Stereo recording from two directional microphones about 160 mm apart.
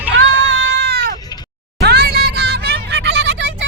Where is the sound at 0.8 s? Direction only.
90° right.